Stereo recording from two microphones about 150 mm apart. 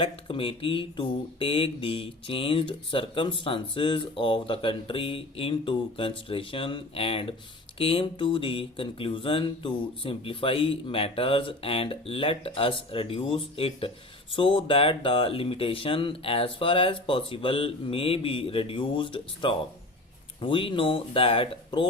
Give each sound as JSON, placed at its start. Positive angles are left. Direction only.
{"t": 0.0, "sound": "speech", "side_deg": 35}